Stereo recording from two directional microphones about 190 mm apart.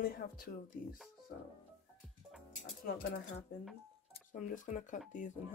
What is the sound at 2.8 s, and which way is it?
Speech, 50° left (ahead or behind).